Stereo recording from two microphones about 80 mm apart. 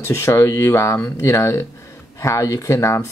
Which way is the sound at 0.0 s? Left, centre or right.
Left.